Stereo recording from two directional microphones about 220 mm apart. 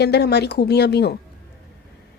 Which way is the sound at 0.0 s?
50° left (ahead or behind).